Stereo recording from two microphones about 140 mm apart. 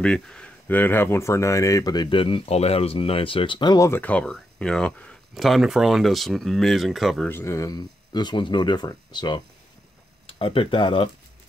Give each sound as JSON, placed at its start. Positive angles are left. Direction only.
{"t": 0.0, "sound": "speech", "side_deg": 5}
{"t": 7.2, "sound": "speech", "side_deg": 20}
{"t": 10.2, "sound": "speech", "side_deg": 40}